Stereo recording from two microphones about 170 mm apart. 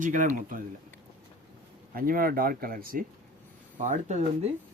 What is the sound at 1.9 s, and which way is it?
Speech, 55° right (ahead or behind).